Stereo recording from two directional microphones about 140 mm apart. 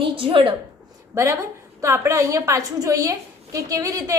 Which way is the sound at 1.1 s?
20° right (ahead or behind).